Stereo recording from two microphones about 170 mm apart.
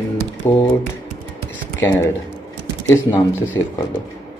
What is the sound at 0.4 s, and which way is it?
Speech, 10° left (ahead or behind).